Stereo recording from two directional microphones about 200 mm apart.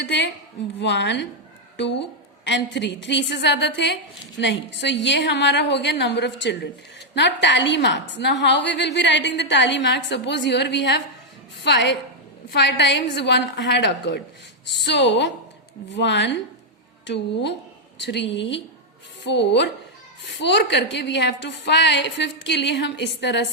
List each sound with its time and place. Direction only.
0.0 s a woman's voice: 60° left (ahead or behind)
17.9 s a woman's voice: 60° left (ahead or behind)